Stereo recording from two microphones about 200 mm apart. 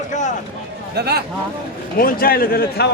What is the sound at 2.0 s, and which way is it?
Speech, 45° left (ahead or behind).